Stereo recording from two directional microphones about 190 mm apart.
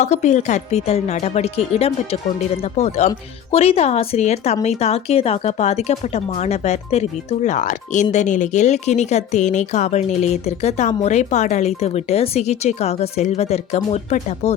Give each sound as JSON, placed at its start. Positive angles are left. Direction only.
{"t": 0.0, "sound": "a woman's voice", "side_deg": 40}